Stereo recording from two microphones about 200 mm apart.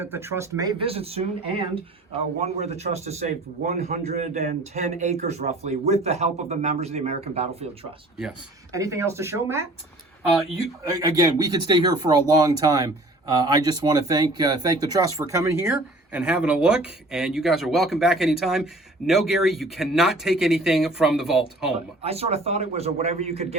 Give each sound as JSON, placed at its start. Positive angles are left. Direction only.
{"t": 0.0, "sound": "speech", "side_deg": -10}
{"t": 8.7, "sound": "speech", "side_deg": -15}
{"t": 10.9, "sound": "speech", "side_deg": -20}
{"t": 22.0, "sound": "speech", "side_deg": -30}